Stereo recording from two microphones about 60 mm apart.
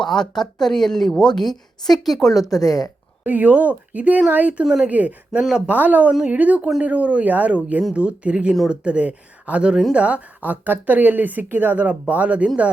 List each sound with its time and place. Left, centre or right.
0.0 s a woman's voice: centre
2.5 s speech: left
3.2 s speech: right
5.4 s speech: centre
5.6 s speech: right